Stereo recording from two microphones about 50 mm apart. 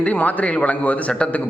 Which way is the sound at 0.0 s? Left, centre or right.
Left.